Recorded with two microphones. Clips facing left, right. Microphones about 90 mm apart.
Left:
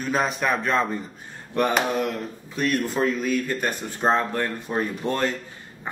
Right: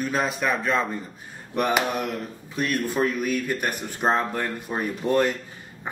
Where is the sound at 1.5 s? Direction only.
15° right (ahead or behind).